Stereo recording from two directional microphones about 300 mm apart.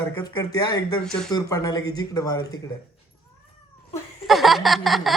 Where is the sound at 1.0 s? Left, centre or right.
Centre.